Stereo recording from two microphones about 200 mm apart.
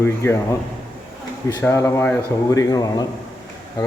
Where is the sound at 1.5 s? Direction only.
15° left (ahead or behind).